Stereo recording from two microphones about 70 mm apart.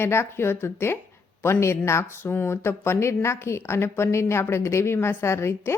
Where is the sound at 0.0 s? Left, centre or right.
Left.